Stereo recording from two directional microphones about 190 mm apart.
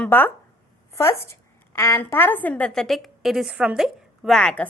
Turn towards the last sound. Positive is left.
turn(degrees=5)  # may be behind; listen again after turning